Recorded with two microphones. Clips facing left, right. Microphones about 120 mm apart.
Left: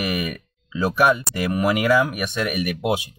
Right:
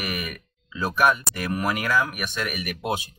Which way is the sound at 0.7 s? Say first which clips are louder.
Left 3 dB; 15° left (ahead or behind).